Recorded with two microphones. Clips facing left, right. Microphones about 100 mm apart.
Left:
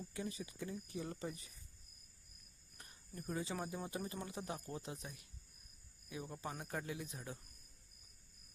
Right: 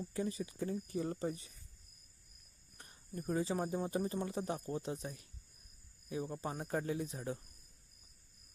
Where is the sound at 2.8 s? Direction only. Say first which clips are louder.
Right 6 dB; 35° right (ahead or behind).